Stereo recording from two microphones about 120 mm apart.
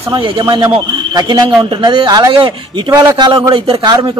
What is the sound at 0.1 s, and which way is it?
A man's voice, 40° right (ahead or behind).